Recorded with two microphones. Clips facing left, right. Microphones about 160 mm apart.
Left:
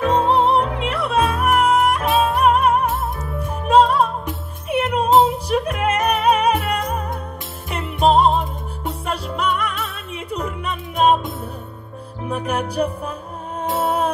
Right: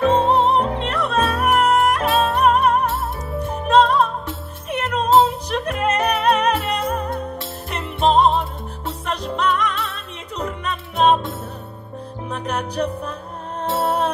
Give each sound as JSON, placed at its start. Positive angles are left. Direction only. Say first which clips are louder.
{"t": 0.0, "sound": "music", "louder": "right 1 dB", "side_deg": -35}
{"t": 0.8, "sound": "music", "louder": "left 1 dB", "side_deg": 10}
{"t": 7.7, "sound": "jingle bell", "louder": "left 1 dB", "side_deg": 10}
{"t": 8.4, "sound": "music", "louder": "left 1 dB", "side_deg": 5}